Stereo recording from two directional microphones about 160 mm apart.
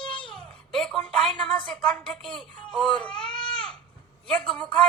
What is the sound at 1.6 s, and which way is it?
A woman's voice, 5° left (ahead or behind).